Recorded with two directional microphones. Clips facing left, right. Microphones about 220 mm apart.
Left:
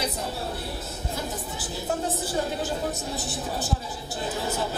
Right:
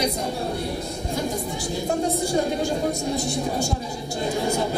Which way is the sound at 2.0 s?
5° left (ahead or behind).